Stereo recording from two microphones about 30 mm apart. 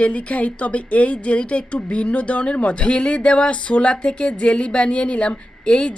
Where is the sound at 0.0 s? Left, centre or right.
Left.